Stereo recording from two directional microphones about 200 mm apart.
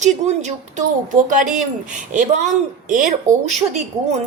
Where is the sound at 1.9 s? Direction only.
40° right (ahead or behind).